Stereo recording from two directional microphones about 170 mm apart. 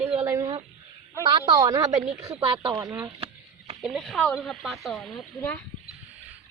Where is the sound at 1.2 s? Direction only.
25° right (ahead or behind).